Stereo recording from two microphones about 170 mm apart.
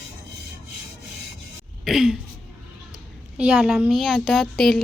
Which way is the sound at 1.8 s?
5° right (ahead or behind).